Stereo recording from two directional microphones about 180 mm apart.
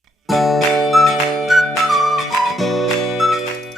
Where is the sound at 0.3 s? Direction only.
Centre (ahead or behind).